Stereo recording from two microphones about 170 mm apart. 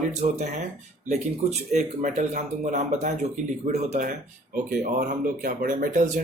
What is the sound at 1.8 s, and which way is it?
Speech, 45° right (ahead or behind).